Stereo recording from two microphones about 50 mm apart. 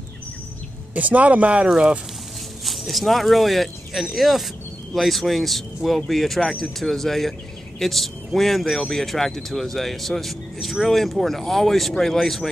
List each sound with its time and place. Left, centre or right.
0.9 s speech: right
2.6 s speech: centre